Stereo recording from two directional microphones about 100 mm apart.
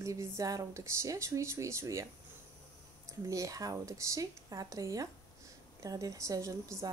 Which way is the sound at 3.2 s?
35° right (ahead or behind).